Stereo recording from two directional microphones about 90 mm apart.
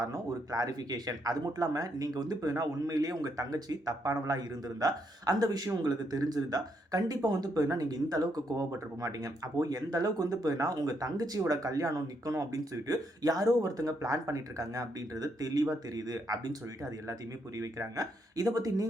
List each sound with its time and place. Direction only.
0.0 s speech: 45° right (ahead or behind)